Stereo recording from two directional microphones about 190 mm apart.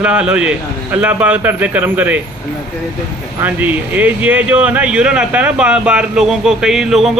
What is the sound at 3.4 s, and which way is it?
Speech, 10° right (ahead or behind).